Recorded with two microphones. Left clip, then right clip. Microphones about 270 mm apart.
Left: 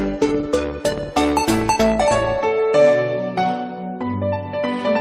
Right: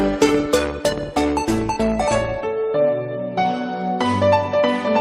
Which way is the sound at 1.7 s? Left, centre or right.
Left.